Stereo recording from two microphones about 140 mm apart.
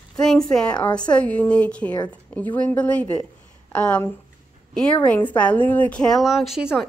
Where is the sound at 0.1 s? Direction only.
5° left (ahead or behind).